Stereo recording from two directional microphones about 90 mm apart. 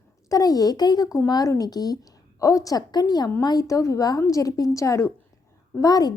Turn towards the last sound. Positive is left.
turn(degrees=45)  # may be behind; listen again after turning